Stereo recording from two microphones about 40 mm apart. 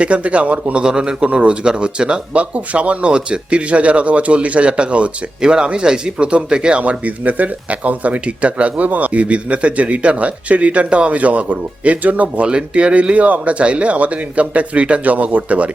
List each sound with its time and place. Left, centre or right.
0.0 s speech: right
12.5 s speech: right